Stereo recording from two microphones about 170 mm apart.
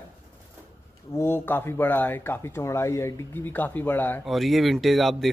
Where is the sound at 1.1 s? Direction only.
15° left (ahead or behind).